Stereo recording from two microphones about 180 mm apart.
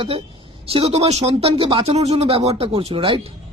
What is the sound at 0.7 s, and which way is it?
Speech, 35° right (ahead or behind).